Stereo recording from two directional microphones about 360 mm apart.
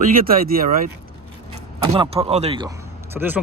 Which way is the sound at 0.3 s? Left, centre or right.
Right.